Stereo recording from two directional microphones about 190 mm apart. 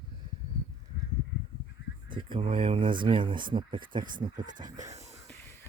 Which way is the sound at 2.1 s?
25° right (ahead or behind).